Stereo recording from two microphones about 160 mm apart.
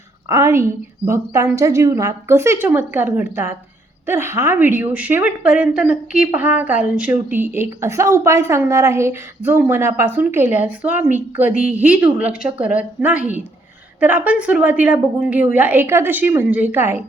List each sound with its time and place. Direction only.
0.3 s a woman's voice: 20° right (ahead or behind)